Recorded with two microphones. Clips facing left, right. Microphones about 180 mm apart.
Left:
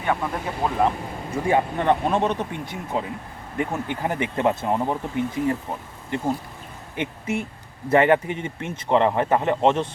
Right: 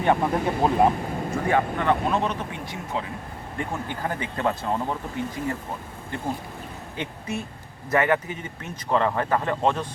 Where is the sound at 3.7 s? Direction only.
20° left (ahead or behind).